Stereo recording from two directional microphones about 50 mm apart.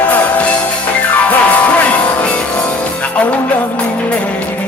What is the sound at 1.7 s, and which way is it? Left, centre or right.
Music, left.